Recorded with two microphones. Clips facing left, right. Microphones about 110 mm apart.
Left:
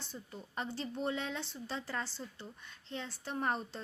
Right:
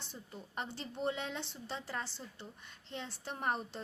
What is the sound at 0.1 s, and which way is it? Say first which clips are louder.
A woman's voice: even; 20° right (ahead or behind).